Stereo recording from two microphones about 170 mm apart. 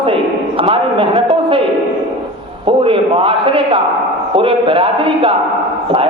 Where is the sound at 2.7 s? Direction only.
30° right (ahead or behind).